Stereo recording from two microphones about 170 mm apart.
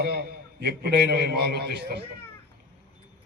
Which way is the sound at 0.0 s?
75° right (ahead or behind).